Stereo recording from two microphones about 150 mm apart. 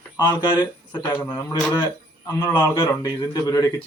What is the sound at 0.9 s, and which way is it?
A man's voice, 15° left (ahead or behind).